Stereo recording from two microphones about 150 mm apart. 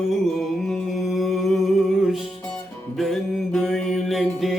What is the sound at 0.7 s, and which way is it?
Music, centre (ahead or behind).